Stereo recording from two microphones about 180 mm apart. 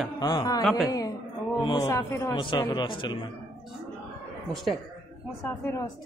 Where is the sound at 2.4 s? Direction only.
25° left (ahead or behind).